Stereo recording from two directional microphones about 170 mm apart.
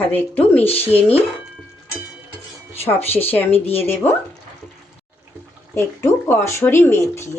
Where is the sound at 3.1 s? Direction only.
10° left (ahead or behind).